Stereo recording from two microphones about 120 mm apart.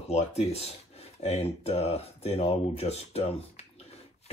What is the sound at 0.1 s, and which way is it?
Speech, 60° left (ahead or behind).